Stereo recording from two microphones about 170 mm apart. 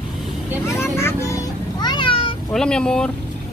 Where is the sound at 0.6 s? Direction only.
15° left (ahead or behind).